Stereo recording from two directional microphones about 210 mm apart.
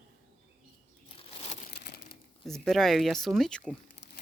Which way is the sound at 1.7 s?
50° left (ahead or behind).